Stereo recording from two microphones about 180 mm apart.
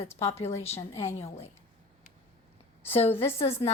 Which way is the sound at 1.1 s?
35° left (ahead or behind).